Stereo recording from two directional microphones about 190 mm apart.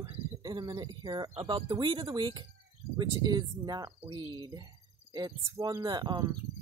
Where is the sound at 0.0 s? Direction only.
25° right (ahead or behind).